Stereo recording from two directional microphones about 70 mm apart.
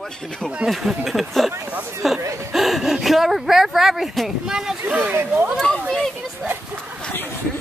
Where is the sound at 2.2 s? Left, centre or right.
Right.